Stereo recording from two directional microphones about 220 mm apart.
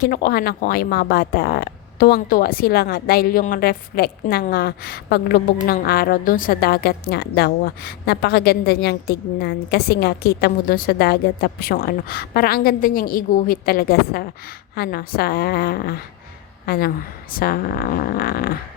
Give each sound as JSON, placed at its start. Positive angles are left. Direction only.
{"t": 0.0, "sound": "speech", "side_deg": 45}